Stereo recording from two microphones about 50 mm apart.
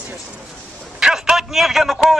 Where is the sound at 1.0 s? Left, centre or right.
Centre.